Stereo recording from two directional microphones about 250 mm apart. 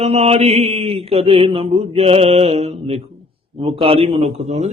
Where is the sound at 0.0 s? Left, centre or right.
Right.